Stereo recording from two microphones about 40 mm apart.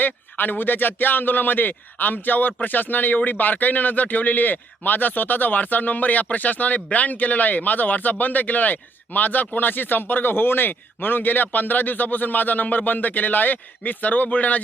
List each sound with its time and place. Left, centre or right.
0.0 s speech: left